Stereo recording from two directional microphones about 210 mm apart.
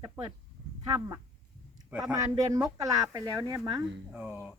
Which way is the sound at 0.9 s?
15° right (ahead or behind).